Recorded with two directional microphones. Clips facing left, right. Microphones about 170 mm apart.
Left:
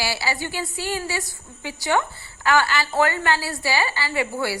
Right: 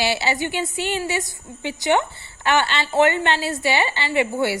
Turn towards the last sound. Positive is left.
turn(degrees=-20)  # may be behind; listen again after turning